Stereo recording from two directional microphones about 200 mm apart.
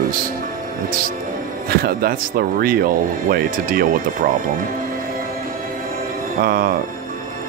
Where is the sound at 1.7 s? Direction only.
50° right (ahead or behind).